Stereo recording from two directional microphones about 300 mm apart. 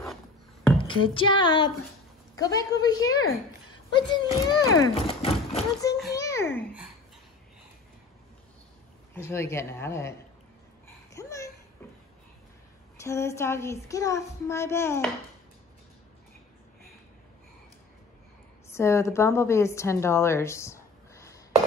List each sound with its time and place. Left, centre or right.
0.7 s speech: centre
3.1 s a sound: left
3.9 s a child's voice: centre
9.1 s speech: centre
11.1 s babbling: centre
13.0 s speech: centre
18.7 s a woman's voice: centre